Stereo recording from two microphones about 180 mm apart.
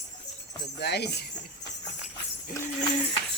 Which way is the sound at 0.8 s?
65° left (ahead or behind).